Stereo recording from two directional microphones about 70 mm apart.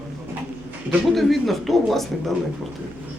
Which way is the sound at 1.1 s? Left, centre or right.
Centre.